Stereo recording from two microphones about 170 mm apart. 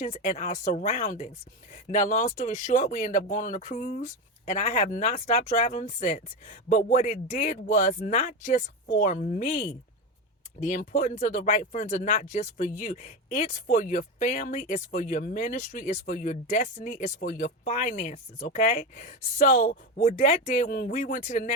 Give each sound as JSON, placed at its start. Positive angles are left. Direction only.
{"t": 0.0, "sound": "speech", "side_deg": 45}